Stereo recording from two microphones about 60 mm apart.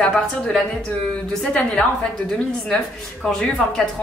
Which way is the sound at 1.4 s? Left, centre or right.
Centre.